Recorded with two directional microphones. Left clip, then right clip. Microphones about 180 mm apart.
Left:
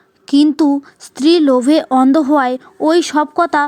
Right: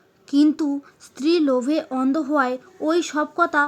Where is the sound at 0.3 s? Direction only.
40° left (ahead or behind).